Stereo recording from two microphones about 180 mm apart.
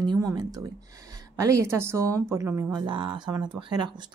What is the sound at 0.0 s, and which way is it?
Speech, 20° right (ahead or behind).